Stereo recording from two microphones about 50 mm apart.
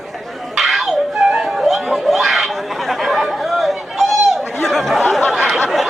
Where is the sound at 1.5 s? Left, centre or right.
Centre.